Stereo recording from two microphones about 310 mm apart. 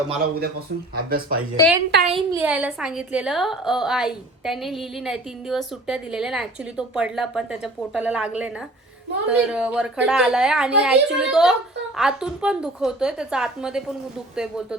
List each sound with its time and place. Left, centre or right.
0.1 s speech: right
1.6 s a woman's voice: centre
2.4 s a woman's voice: centre